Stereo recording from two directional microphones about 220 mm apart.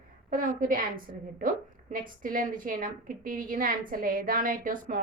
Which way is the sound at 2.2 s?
40° right (ahead or behind).